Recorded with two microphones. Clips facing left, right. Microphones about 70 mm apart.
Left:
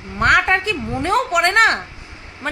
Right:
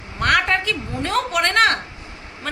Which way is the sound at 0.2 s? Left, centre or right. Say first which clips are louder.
Left 3 dB; left.